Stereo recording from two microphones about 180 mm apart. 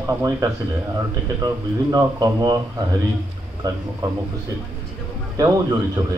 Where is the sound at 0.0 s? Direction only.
20° right (ahead or behind).